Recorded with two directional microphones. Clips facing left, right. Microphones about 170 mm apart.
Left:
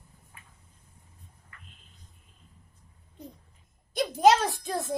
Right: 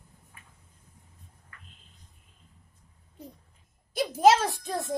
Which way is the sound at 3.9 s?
5° right (ahead or behind).